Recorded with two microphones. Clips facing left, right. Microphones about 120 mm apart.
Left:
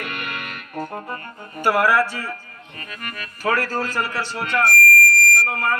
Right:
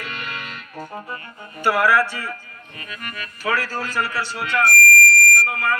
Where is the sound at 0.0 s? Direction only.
60° left (ahead or behind).